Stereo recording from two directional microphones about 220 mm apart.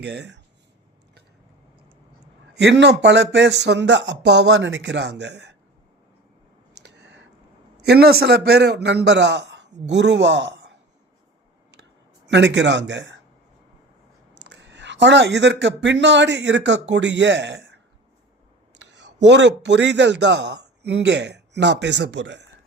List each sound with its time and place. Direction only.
0.0 s speech: 50° right (ahead or behind)
2.6 s speech: 55° right (ahead or behind)
6.8 s a sound: 50° right (ahead or behind)
7.8 s speech: 45° right (ahead or behind)
12.2 s speech: 55° right (ahead or behind)
14.3 s speech: 50° right (ahead or behind)
18.8 s speech: 50° right (ahead or behind)